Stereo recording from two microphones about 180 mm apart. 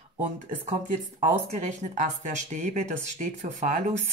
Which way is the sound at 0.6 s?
40° right (ahead or behind).